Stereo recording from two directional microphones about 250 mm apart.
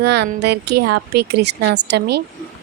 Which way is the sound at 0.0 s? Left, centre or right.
Right.